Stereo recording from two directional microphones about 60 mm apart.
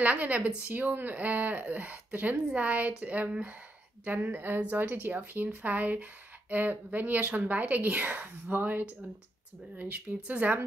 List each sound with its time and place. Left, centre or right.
0.0 s a woman's voice: right